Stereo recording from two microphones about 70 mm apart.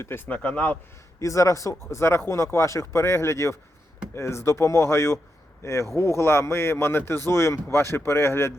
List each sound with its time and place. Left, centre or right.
0.0 s speech: left
0.3 s speech: left
1.2 s speech: left